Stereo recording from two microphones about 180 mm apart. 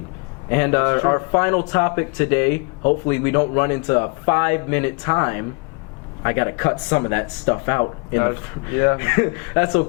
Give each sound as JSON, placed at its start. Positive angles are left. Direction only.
{"t": 0.5, "sound": "speech", "side_deg": 15}